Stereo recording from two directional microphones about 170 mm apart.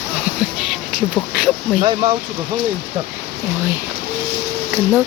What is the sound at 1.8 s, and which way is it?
Speech, 30° right (ahead or behind).